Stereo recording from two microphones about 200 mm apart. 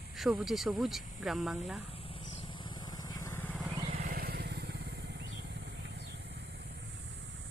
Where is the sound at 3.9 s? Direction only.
50° right (ahead or behind).